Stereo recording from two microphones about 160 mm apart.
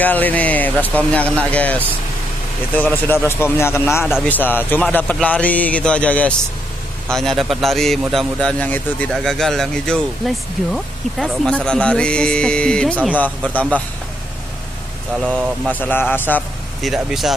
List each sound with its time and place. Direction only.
0.0 s a man's voice: 10° left (ahead or behind)
15.2 s speech: 5° left (ahead or behind)
16.8 s a man's voice: centre (ahead or behind)